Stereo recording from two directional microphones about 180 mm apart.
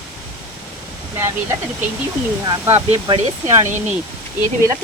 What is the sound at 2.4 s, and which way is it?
Speech, 15° right (ahead or behind).